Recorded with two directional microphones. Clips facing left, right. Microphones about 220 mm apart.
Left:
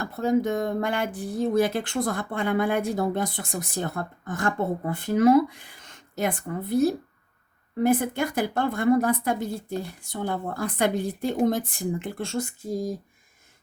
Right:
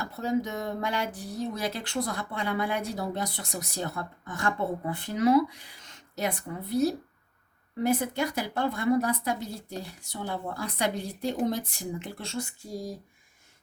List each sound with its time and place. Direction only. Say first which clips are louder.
0.0 s speech: left 5 dB; 50° left (ahead or behind)